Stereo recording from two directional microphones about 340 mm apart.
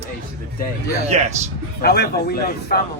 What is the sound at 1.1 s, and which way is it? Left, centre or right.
Speech, centre.